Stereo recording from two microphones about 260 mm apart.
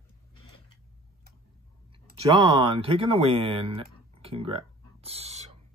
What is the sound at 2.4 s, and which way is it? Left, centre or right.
Speech, centre.